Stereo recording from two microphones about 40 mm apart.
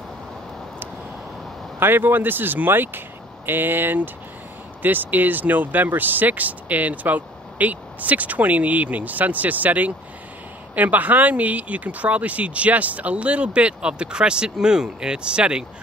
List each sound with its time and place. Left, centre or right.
1.8 s speech: right